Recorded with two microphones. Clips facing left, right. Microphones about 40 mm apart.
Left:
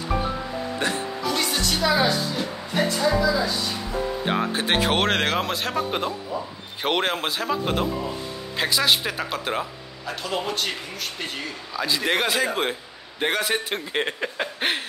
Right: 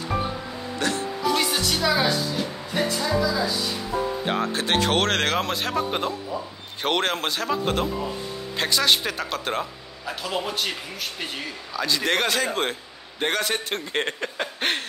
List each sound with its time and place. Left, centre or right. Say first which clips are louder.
0.7 s speech: right 1 dB; left
1.2 s music: right 2 dB; centre
4.2 s speech: left 1 dB; centre
11.7 s speech: even; centre